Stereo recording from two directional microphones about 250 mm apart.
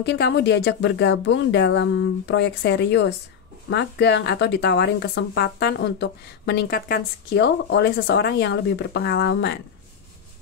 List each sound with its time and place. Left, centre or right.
0.0 s speech: left